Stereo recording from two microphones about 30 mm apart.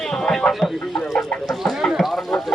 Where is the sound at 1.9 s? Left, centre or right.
Centre.